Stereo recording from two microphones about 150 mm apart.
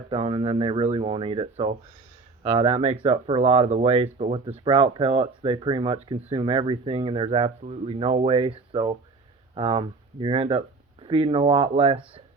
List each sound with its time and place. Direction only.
0.1 s speech: 35° right (ahead or behind)